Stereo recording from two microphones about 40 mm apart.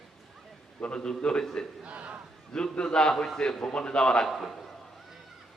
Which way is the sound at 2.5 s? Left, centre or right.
Left.